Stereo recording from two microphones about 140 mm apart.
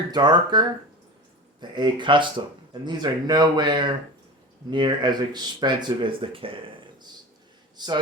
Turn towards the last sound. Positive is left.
turn(degrees=-30)  # may be behind; listen again after turning